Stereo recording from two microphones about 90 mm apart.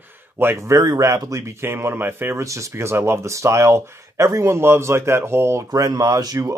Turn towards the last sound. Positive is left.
turn(degrees=-40)  # may be behind; listen again after turning